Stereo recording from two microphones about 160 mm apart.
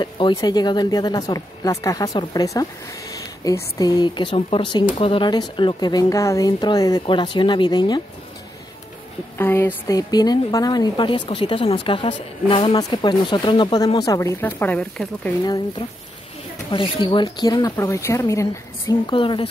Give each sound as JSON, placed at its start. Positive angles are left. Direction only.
{"t": 0.0, "sound": "a woman's voice", "side_deg": 30}
{"t": 9.4, "sound": "a woman's voice", "side_deg": 10}
{"t": 14.4, "sound": "speech", "side_deg": 10}
{"t": 16.7, "sound": "a woman's voice", "side_deg": 30}